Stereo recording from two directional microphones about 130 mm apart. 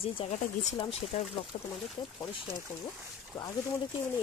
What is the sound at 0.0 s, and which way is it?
Speech, 50° left (ahead or behind).